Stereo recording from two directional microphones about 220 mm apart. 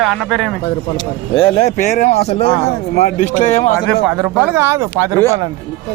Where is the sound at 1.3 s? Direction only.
30° left (ahead or behind).